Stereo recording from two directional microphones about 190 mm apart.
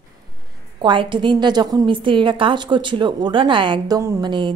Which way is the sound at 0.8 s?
25° right (ahead or behind).